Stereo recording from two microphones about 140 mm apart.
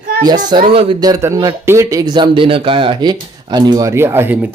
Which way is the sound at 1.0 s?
25° right (ahead or behind).